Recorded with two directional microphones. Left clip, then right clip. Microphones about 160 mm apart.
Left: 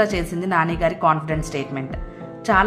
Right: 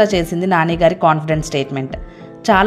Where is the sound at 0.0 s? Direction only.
30° right (ahead or behind).